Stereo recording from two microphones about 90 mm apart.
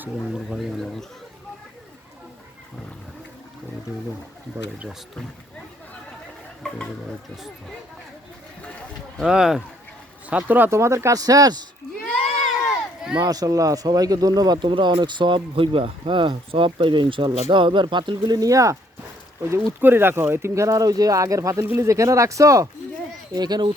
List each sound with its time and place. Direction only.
0.5 s speech: 5° left (ahead or behind)
6.6 s a sound: 10° left (ahead or behind)
9.2 s speech: 5° right (ahead or behind)
10.2 s speech: 20° right (ahead or behind)
10.7 s speech: 30° right (ahead or behind)
12.0 s a sound: 5° left (ahead or behind)
13.1 s speech: 45° right (ahead or behind); by 16.3 s 70° right (ahead or behind)
16.5 s speech: 85° right; by 18.3 s 60° right (ahead or behind)
18.3 s speech: 40° right (ahead or behind)
19.8 s speech: 25° right (ahead or behind)
23.3 s speech: 50° right (ahead or behind)